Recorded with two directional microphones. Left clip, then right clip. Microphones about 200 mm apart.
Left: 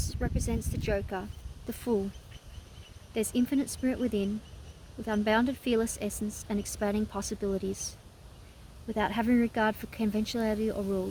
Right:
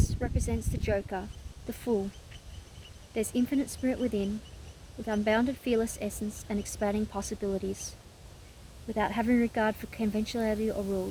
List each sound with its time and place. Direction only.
0.1 s speech: 45° left (ahead or behind)
3.2 s speech: 45° left (ahead or behind)